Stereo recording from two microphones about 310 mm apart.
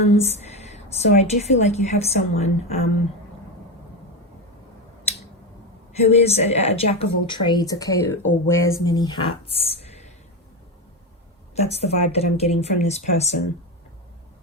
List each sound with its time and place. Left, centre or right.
0.2 s a sound: left
1.2 s speech: left
6.0 s speech: centre
11.5 s speech: centre